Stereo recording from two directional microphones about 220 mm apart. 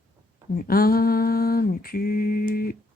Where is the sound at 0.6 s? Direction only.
45° left (ahead or behind).